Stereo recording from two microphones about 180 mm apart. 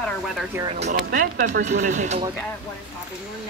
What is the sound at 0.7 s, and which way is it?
Speech, 40° right (ahead or behind).